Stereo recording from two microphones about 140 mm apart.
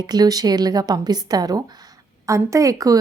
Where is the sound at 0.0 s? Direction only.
30° right (ahead or behind).